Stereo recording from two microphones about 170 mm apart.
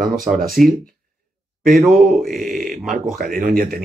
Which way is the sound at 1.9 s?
Centre (ahead or behind).